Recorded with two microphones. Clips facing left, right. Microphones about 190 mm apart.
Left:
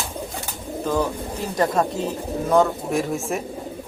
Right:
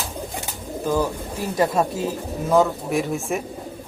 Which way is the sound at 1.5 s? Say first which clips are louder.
Even; 5° right (ahead or behind).